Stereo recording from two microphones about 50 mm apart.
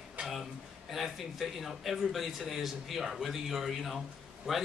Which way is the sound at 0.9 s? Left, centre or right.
Centre.